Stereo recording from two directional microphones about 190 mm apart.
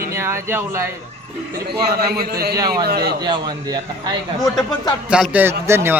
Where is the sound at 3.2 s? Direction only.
20° right (ahead or behind).